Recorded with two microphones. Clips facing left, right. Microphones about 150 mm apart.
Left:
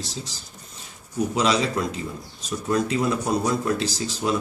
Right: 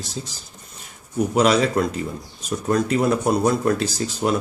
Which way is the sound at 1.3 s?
55° right (ahead or behind).